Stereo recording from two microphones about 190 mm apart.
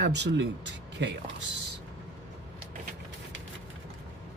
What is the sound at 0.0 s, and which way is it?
Speech, 65° right (ahead or behind).